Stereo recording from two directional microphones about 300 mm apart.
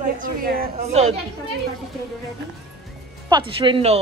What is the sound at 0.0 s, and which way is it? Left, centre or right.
A woman's voice, right.